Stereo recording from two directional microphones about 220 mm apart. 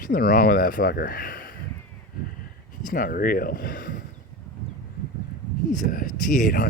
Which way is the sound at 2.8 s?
40° left (ahead or behind).